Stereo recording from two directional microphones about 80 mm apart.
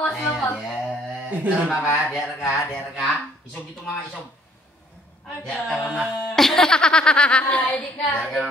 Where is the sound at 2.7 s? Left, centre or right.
Centre.